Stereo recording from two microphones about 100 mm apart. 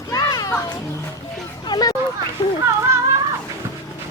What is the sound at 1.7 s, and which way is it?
Hubbub, 40° left (ahead or behind).